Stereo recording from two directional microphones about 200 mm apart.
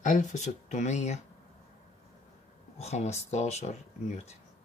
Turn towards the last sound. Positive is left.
turn(degrees=35)  # may be behind; listen again after turning